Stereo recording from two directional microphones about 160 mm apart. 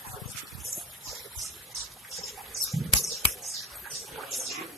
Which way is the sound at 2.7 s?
Centre (ahead or behind).